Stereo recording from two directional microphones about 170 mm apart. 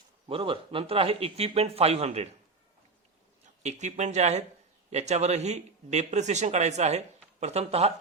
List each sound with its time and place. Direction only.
0.3 s speech: 30° right (ahead or behind)
3.6 s speech: 40° right (ahead or behind)